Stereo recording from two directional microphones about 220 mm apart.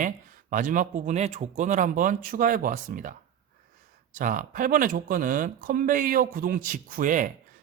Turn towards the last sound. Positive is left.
turn(degrees=-35)  # may be behind; listen again after turning